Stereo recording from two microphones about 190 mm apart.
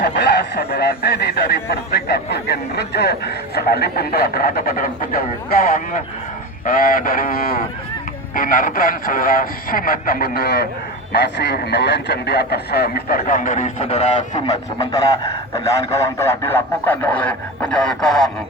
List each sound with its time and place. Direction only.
0.0 s speech: 60° left (ahead or behind); by 14.4 s 35° left (ahead or behind)
16.1 s speech: 15° left (ahead or behind)